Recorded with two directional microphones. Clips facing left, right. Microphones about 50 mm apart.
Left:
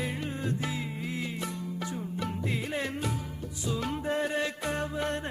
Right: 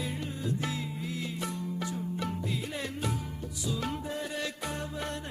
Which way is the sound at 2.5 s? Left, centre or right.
Left.